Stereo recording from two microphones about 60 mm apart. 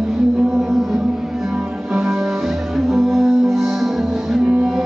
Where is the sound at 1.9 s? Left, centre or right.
Centre.